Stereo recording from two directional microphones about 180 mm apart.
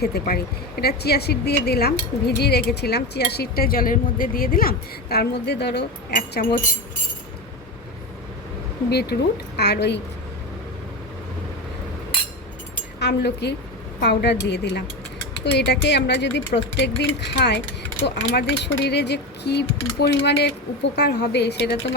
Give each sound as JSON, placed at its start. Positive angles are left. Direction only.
{"t": 0.0, "sound": "speech", "side_deg": 60}
{"t": 8.9, "sound": "speech", "side_deg": 65}
{"t": 13.0, "sound": "speech", "side_deg": 70}